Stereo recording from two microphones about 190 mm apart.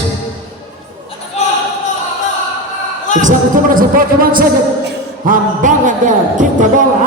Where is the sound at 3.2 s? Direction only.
45° right (ahead or behind).